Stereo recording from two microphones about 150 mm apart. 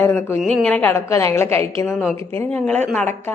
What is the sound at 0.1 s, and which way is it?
A woman's voice, 15° left (ahead or behind).